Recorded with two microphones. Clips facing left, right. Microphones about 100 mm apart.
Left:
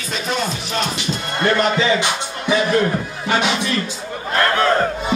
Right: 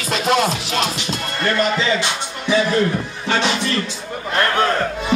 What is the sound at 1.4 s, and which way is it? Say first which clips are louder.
Speech: left 2 dB; 20° left (ahead or behind).